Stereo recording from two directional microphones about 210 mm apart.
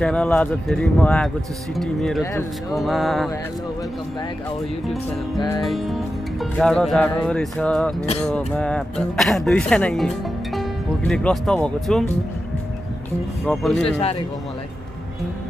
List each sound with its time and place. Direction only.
0.0 s speech: 5° left (ahead or behind)
5.6 s speech: centre (ahead or behind)
13.5 s speech: centre (ahead or behind)
13.8 s speech: 30° left (ahead or behind)